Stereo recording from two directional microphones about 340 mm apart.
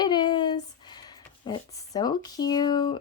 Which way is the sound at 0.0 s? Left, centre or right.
Centre.